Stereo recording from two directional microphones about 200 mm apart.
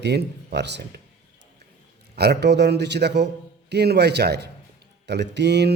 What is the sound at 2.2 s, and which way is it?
Speech, 55° right (ahead or behind).